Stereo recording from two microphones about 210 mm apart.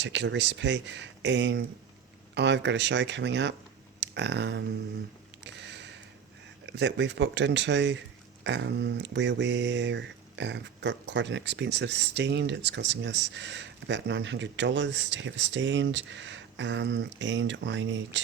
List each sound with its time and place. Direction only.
0.0 s speech: 60° right (ahead or behind)
5.4 s a sound: 55° right (ahead or behind)
6.7 s speech: 55° right (ahead or behind)